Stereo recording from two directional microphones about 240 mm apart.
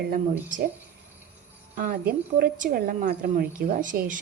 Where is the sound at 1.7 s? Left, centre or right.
Right.